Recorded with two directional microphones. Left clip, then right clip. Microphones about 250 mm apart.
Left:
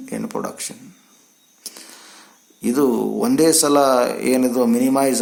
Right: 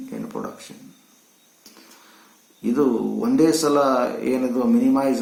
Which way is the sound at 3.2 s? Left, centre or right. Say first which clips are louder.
Left 2 dB; left.